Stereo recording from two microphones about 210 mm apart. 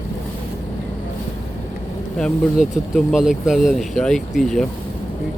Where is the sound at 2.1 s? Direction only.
Centre (ahead or behind).